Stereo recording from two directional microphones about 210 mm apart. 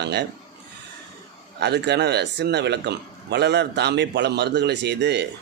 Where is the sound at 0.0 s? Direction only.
55° right (ahead or behind).